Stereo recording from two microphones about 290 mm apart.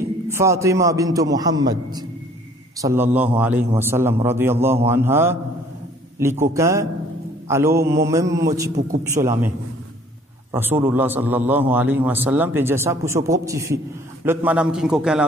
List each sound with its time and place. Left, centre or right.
0.3 s a man's voice: centre
8.7 s a man's voice: right
9.2 s a man's voice: centre
10.5 s a man's voice: centre